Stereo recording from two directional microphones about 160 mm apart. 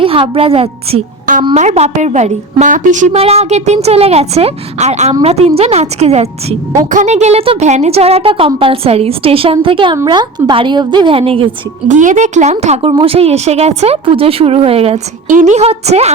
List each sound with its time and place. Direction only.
0.0 s a woman's voice: 35° right (ahead or behind); by 3.1 s 50° right (ahead or behind)
3.1 s a woman's voice: 40° right (ahead or behind)
11.9 s a woman's voice: 50° right (ahead or behind)
15.3 s a woman's voice: 50° right (ahead or behind)